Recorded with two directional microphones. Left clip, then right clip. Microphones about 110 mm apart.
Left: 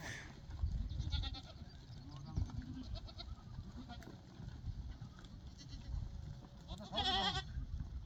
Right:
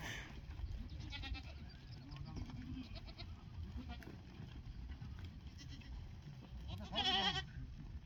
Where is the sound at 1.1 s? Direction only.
Centre (ahead or behind).